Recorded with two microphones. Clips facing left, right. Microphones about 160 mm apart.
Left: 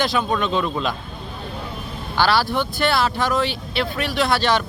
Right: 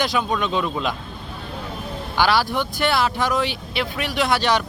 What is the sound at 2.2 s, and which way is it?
Speech, 15° right (ahead or behind).